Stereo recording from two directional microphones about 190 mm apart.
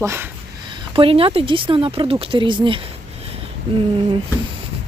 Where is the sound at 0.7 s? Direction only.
30° right (ahead or behind).